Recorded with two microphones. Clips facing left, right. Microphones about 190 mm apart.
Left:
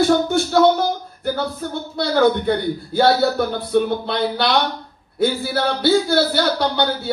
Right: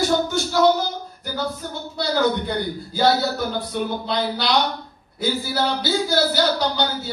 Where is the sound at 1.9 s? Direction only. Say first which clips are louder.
Left 4 dB; 60° left (ahead or behind).